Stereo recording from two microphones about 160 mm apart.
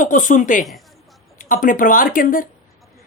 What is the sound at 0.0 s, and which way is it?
Speech, 55° left (ahead or behind).